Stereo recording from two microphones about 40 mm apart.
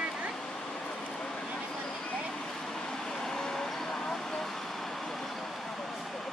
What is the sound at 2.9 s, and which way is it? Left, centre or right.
Vehicle, centre.